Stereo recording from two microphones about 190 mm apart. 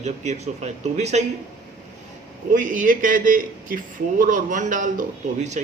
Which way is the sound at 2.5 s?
45° right (ahead or behind).